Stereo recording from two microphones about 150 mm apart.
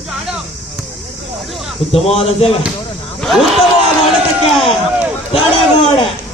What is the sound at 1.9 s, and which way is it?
Speech, 40° left (ahead or behind).